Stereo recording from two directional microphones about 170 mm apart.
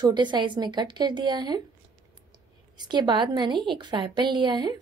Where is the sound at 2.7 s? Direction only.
25° right (ahead or behind).